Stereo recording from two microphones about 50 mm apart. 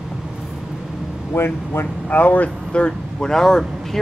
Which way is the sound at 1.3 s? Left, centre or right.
Left.